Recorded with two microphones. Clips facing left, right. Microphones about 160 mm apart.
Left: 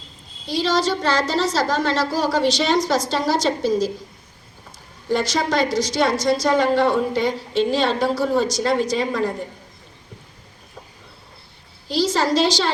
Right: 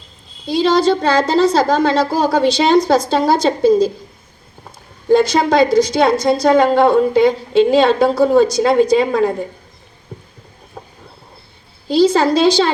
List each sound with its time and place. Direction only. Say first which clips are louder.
0.6 s a woman's voice: right 7 dB; 55° right (ahead or behind)
5.0 s a woman's voice: right 9 dB; 55° right (ahead or behind)
10.8 s train: right 7 dB; 60° right (ahead or behind)
12.0 s a woman's voice: right 6 dB; 55° right (ahead or behind)